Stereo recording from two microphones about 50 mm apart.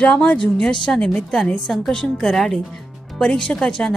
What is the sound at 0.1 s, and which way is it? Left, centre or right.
A woman's voice, centre.